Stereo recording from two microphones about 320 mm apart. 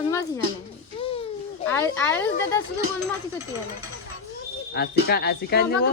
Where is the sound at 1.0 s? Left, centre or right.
Centre.